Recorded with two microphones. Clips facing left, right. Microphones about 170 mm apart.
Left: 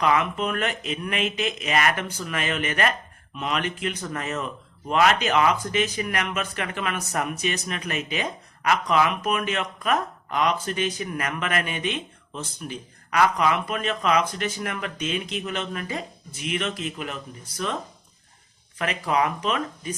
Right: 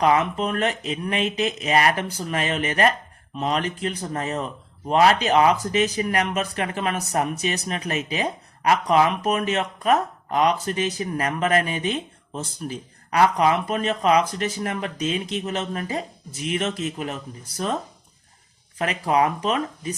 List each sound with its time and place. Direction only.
0.0 s speech: 35° right (ahead or behind)
18.8 s speech: 35° right (ahead or behind)